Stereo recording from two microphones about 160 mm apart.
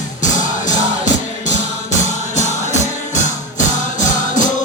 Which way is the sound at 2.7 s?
50° left (ahead or behind).